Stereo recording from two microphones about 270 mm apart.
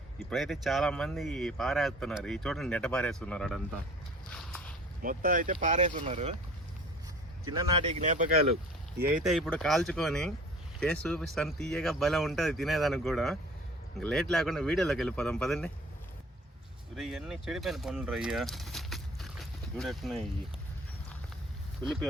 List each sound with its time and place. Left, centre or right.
0.3 s speech: centre
4.3 s walk: centre
5.0 s speech: right
7.4 s speech: centre
7.9 s speech: right
9.2 s speech: centre
16.9 s speech: centre